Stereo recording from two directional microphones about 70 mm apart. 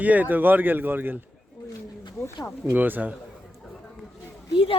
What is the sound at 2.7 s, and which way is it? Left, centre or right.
Speech, right.